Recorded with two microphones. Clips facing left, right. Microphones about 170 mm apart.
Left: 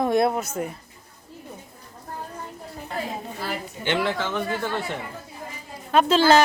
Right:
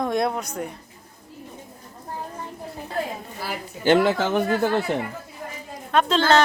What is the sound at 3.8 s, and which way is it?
Speech, 45° right (ahead or behind).